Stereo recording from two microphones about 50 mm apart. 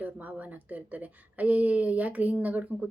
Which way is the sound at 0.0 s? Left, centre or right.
Right.